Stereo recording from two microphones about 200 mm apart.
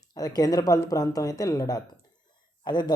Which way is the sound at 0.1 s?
20° left (ahead or behind).